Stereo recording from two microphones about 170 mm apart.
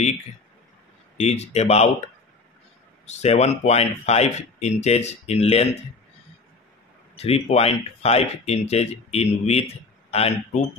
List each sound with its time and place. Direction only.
1.2 s speech: 40° left (ahead or behind)
3.1 s speech: 40° left (ahead or behind)
7.2 s speech: 35° left (ahead or behind)